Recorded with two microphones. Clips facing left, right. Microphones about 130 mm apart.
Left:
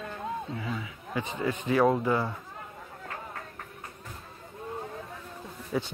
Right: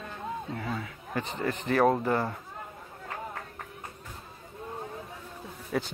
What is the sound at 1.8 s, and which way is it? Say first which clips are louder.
Speech: even; 45° right (ahead or behind).